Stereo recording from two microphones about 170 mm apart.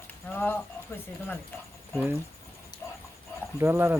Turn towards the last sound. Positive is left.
turn(degrees=-15)  # may be behind; listen again after turning